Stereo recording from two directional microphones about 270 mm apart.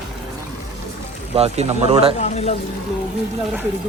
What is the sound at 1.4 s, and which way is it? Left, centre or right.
Speech, right.